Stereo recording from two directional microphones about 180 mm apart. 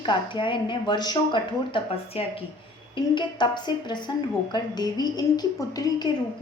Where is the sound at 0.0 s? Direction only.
25° left (ahead or behind).